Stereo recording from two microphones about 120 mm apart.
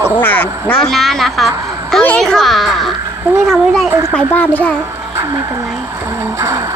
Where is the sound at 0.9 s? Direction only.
Centre (ahead or behind).